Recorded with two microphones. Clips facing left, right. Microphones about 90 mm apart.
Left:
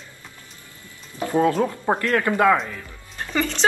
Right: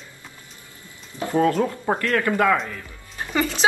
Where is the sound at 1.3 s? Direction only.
20° left (ahead or behind).